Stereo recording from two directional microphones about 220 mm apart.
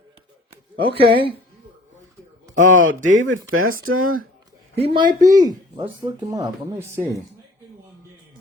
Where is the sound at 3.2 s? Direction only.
70° right (ahead or behind).